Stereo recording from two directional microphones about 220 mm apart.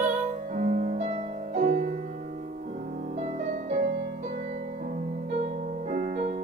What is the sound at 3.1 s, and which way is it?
Music, 30° right (ahead or behind).